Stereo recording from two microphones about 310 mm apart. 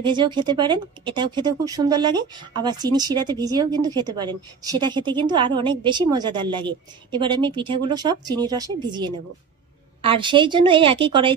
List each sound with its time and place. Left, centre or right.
0.0 s speech: centre